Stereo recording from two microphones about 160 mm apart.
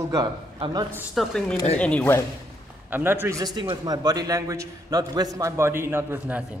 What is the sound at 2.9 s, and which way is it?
A man's voice, 15° right (ahead or behind).